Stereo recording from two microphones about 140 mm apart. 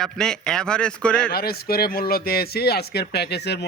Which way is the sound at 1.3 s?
90° left.